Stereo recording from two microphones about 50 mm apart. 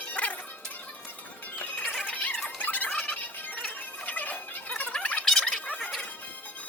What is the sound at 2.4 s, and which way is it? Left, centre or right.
Squeal, left.